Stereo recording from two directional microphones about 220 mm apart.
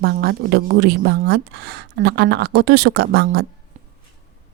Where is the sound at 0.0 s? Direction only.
45° right (ahead or behind).